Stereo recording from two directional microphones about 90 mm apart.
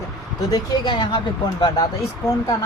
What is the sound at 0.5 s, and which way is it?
Speech, 50° left (ahead or behind).